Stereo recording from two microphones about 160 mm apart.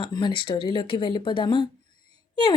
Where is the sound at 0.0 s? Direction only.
30° left (ahead or behind).